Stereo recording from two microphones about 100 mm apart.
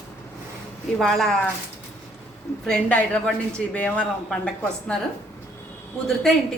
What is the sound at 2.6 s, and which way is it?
A woman's voice, 10° left (ahead or behind).